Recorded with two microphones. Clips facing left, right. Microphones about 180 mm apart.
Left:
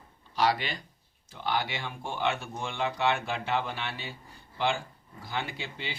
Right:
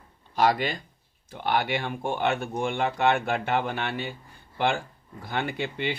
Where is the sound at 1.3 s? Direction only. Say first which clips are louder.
Right 5 dB; 60° right (ahead or behind).